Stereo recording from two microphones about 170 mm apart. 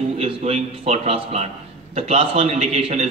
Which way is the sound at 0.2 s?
35° right (ahead or behind).